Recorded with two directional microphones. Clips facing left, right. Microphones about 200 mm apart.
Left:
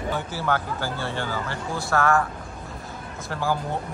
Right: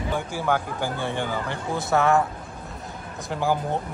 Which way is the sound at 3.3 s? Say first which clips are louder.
Right 2 dB; 15° right (ahead or behind).